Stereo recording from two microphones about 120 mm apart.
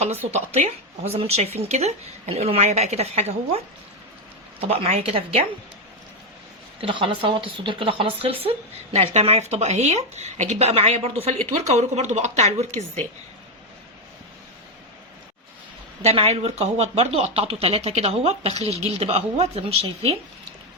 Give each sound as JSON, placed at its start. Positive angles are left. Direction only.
{"t": 0.3, "sound": "speech", "side_deg": -65}
{"t": 1.4, "sound": "speech", "side_deg": -70}
{"t": 4.7, "sound": "speech", "side_deg": -55}
{"t": 6.8, "sound": "speech", "side_deg": -45}
{"t": 16.0, "sound": "speech", "side_deg": -60}